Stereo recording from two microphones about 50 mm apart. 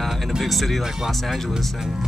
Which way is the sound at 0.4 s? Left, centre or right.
Centre.